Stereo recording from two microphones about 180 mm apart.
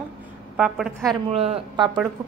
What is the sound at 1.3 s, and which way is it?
Speech, 35° right (ahead or behind).